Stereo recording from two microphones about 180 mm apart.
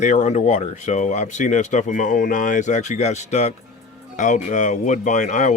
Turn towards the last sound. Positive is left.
turn(degrees=45)  # may be behind; listen again after turning